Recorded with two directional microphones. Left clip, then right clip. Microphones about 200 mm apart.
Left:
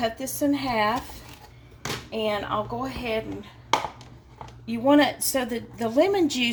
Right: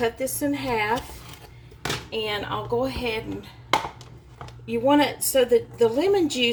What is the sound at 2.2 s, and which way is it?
Speech, 25° left (ahead or behind).